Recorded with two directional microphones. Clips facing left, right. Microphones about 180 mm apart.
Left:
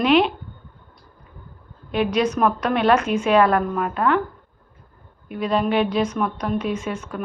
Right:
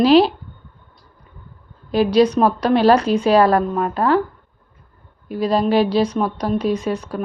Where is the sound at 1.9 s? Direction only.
35° right (ahead or behind).